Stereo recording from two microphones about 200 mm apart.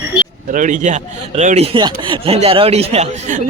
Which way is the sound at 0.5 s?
40° right (ahead or behind).